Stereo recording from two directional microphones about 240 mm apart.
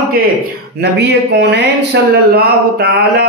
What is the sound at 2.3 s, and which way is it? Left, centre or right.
Speech, right.